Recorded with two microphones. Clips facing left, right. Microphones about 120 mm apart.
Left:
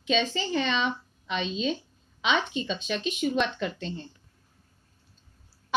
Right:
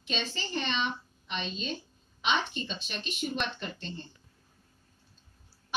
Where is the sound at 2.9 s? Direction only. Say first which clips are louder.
Left 10 dB; 90° left.